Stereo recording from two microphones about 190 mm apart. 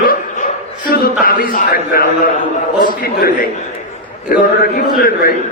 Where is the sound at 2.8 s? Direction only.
50° left (ahead or behind).